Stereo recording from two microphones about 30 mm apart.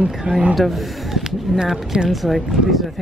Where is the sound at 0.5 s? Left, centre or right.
Centre.